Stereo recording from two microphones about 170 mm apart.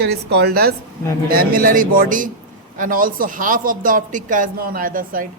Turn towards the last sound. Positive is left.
turn(degrees=-55)  # may be behind; listen again after turning